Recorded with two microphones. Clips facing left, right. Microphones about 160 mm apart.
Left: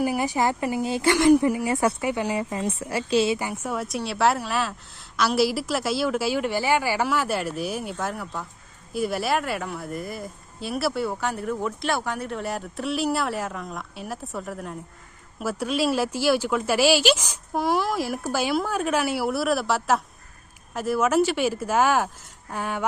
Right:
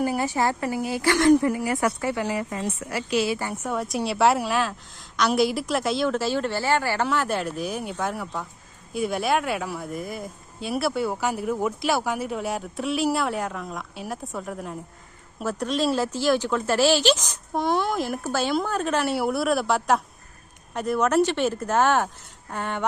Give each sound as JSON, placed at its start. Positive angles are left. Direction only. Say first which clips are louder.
{"t": 0.0, "sound": "speech", "louder": "even", "side_deg": 10}
{"t": 1.1, "sound": "speech", "louder": "even", "side_deg": 15}
{"t": 3.3, "sound": "speech", "louder": "even", "side_deg": 15}
{"t": 3.7, "sound": "speech", "louder": "right 4 dB", "side_deg": 0}